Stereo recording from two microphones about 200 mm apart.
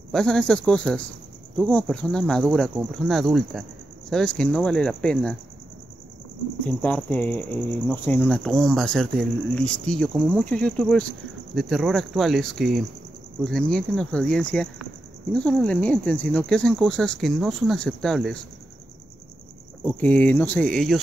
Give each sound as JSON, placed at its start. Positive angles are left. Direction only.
{"t": 0.1, "sound": "speech", "side_deg": 5}
{"t": 6.6, "sound": "speech", "side_deg": 10}
{"t": 19.8, "sound": "speech", "side_deg": 5}